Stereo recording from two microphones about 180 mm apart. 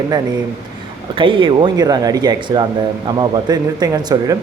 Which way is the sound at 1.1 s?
25° right (ahead or behind).